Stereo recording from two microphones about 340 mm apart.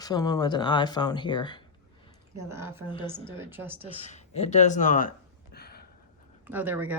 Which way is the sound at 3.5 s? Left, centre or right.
Centre.